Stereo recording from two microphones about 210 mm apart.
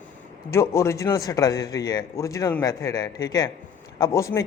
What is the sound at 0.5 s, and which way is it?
A man's voice, 10° left (ahead or behind).